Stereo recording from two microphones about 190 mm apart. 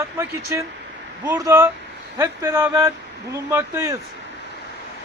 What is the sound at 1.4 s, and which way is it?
Speech, 15° right (ahead or behind).